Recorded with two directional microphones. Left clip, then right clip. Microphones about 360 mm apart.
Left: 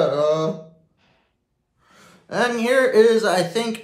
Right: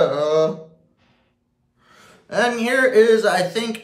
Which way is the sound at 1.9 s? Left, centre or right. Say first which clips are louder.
Right 3 dB; centre.